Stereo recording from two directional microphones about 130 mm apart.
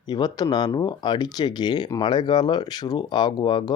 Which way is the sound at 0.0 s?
30° left (ahead or behind).